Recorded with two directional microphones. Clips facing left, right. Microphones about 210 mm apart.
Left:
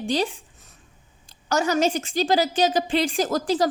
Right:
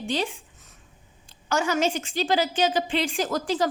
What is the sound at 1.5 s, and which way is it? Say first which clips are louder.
A woman's voice: left 3 dB; 40° left (ahead or behind).